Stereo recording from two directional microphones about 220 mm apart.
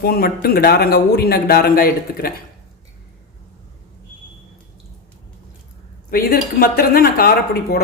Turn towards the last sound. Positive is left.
turn(degrees=45)  # may be behind; listen again after turning